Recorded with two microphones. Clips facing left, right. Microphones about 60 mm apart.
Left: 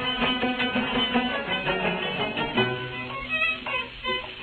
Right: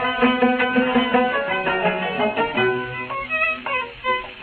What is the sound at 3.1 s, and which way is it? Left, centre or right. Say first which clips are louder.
Music: right 5 dB; right.